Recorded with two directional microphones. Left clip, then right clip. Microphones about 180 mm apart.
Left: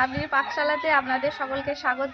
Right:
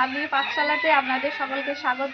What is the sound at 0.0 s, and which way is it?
A woman's voice, 25° left (ahead or behind).